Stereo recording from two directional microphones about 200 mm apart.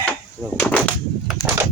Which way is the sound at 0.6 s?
5° left (ahead or behind).